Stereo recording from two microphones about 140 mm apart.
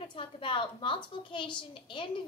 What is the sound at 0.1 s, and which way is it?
A woman's voice, 35° left (ahead or behind).